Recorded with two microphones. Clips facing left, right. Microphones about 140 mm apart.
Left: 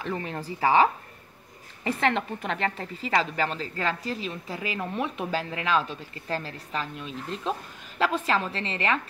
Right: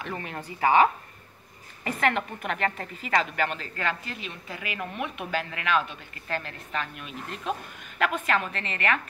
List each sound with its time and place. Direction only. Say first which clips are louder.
0.0 s a woman's voice: left 3 dB; 30° left (ahead or behind)
1.9 s a woman's voice: left 1 dB; 30° left (ahead or behind)